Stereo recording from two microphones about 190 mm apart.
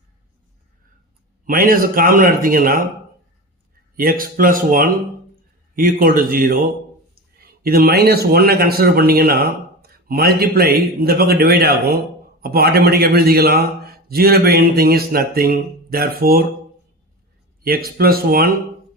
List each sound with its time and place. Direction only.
1.5 s speech: 50° right (ahead or behind)
3.9 s a man's voice: 50° right (ahead or behind)
17.6 s speech: 50° right (ahead or behind)